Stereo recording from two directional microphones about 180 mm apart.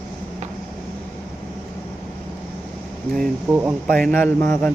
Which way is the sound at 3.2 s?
10° right (ahead or behind).